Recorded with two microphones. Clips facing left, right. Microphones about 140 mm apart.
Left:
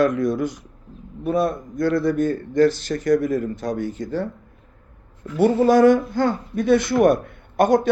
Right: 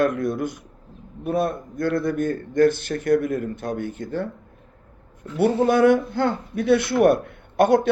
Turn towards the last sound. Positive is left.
turn(degrees=-60)  # may be behind; listen again after turning